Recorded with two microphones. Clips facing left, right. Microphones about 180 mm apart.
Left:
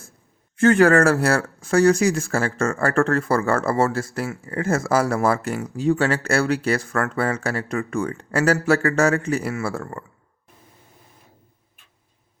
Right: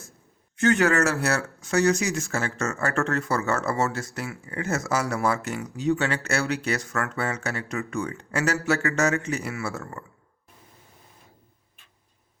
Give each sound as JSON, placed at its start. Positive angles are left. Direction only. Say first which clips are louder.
{"t": 0.6, "sound": "speech", "louder": "left 6 dB", "side_deg": 55}
{"t": 6.0, "sound": "speech", "louder": "left 6 dB", "side_deg": 35}
{"t": 6.3, "sound": "speech", "louder": "left 6 dB", "side_deg": 50}